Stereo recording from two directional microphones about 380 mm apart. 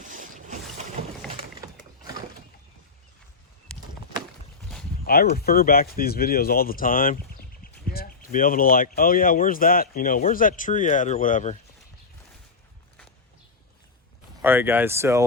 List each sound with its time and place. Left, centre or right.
0.0 s boat: centre
5.0 s speech: left
14.4 s speech: centre